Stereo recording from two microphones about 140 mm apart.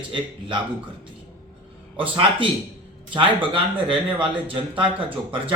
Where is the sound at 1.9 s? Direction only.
40° right (ahead or behind).